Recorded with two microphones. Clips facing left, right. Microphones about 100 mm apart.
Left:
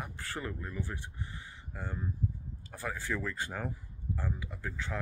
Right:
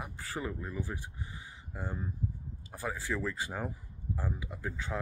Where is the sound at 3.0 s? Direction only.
5° right (ahead or behind).